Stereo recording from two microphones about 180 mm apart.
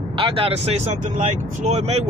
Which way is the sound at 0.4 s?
35° right (ahead or behind).